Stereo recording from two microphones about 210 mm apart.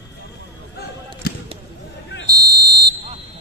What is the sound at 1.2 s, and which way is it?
Basketball bounce, 50° left (ahead or behind).